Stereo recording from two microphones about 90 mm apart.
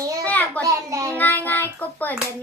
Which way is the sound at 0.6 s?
35° right (ahead or behind).